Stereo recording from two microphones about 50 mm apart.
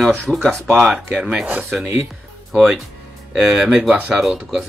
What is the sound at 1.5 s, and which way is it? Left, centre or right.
Speech, right.